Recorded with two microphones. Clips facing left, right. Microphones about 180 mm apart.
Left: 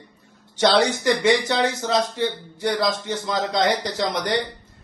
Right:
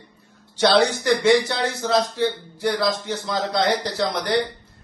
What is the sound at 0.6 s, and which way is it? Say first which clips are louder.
A man's voice: even; 15° left (ahead or behind).